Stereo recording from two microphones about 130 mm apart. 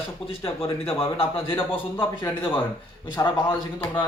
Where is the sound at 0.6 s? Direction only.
45° left (ahead or behind).